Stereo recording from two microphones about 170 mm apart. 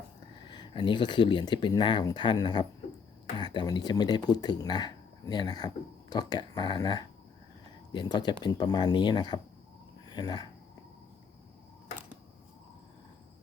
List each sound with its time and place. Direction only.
0.4 s speech: 30° left (ahead or behind)